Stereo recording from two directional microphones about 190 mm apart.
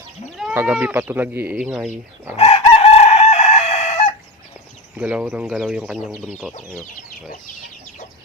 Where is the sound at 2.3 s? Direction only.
30° left (ahead or behind).